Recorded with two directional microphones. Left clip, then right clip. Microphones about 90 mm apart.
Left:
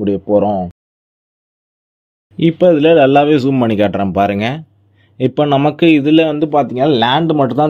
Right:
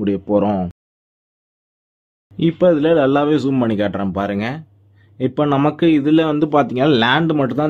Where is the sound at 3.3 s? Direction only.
35° left (ahead or behind).